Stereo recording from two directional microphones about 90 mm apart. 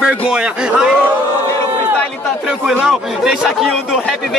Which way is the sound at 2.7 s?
5° right (ahead or behind).